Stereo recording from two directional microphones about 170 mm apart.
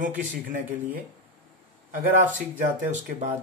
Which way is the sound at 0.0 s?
50° right (ahead or behind).